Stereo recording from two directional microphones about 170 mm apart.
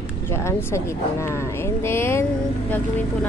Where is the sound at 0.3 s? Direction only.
15° left (ahead or behind).